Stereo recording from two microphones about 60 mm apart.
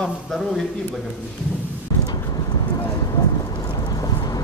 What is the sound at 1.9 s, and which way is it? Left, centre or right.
Vehicle, left.